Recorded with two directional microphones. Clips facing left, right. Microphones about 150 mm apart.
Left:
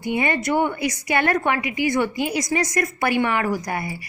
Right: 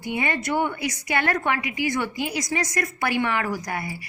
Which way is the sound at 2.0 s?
50° left (ahead or behind).